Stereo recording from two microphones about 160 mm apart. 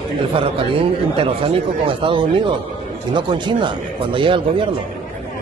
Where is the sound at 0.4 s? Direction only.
35° right (ahead or behind).